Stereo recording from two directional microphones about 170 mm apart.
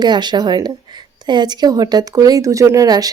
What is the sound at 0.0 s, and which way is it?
Speech, 25° right (ahead or behind).